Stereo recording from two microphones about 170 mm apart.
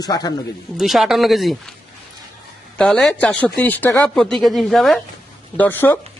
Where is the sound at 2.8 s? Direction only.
5° left (ahead or behind).